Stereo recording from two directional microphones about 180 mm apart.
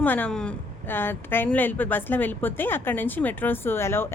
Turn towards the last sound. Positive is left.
turn(degrees=15)  # may be behind; listen again after turning